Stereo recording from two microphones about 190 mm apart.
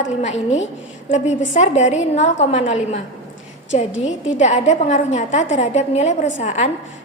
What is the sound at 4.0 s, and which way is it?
A woman's voice, 35° left (ahead or behind).